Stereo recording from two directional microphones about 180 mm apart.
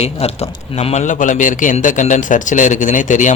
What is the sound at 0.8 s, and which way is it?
A man's voice, 35° left (ahead or behind).